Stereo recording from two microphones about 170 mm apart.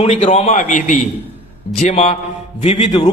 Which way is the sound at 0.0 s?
40° left (ahead or behind).